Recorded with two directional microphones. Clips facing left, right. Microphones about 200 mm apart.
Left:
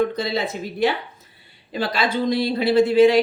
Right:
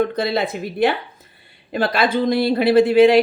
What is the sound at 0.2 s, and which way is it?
Speech, 55° right (ahead or behind).